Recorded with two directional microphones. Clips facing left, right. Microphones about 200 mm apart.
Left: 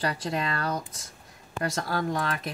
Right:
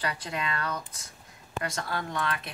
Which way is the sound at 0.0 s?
35° left (ahead or behind).